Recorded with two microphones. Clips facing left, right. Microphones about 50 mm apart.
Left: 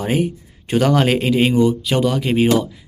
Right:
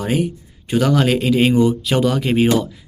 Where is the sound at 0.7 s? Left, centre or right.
Left.